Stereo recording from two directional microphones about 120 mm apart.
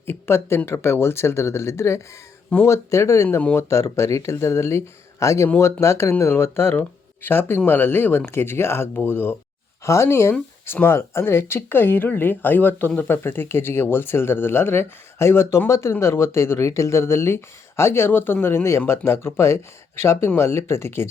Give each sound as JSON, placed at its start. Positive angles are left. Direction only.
{"t": 0.0, "sound": "speech", "side_deg": 20}